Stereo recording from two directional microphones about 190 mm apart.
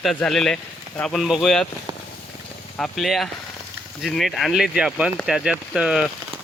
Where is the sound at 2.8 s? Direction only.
Centre (ahead or behind).